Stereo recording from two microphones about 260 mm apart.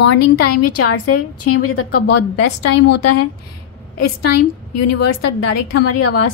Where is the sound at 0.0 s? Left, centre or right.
Left.